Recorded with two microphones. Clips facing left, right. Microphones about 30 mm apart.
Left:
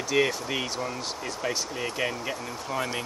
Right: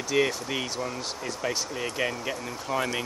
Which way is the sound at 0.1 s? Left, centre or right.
Centre.